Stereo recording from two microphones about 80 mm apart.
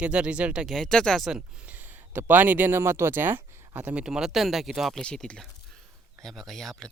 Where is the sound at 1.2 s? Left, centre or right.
Centre; by 4.0 s right.